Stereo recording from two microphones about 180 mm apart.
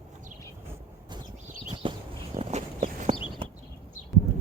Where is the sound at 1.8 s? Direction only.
30° right (ahead or behind).